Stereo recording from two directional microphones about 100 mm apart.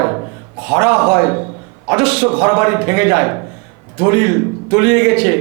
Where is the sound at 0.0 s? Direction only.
25° right (ahead or behind).